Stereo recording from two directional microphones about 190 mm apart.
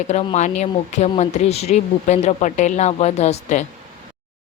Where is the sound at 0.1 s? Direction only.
35° left (ahead or behind).